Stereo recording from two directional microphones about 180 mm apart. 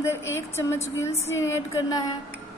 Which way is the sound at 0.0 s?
15° left (ahead or behind).